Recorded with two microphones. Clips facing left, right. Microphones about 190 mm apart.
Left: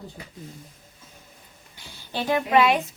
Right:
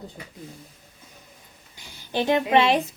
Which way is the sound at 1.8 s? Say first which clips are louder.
Right 4 dB; 15° right (ahead or behind).